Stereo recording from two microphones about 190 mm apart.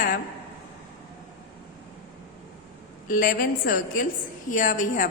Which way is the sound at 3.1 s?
45° left (ahead or behind).